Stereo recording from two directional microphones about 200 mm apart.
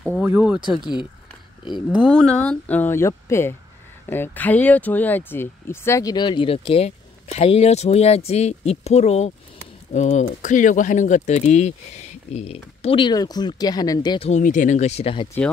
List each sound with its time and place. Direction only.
0.0 s speech: 10° right (ahead or behind)
0.7 s speech: 25° left (ahead or behind)
1.9 s speech: centre (ahead or behind); by 14.3 s 20° left (ahead or behind)
14.3 s speech: 40° left (ahead or behind)